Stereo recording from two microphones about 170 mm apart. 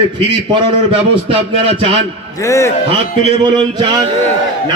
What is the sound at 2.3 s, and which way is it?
Speech, 20° left (ahead or behind).